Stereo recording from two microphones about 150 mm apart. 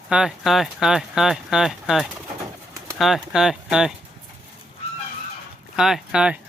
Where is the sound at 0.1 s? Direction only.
5° right (ahead or behind).